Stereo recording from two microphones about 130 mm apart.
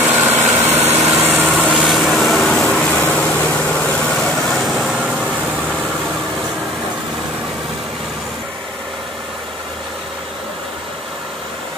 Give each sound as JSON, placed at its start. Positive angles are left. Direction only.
{"t": 0.0, "sound": "vehicle", "side_deg": -15}
{"t": 1.6, "sound": "vehicle", "side_deg": -5}